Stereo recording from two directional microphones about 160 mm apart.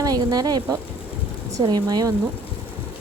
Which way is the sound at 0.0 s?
25° right (ahead or behind).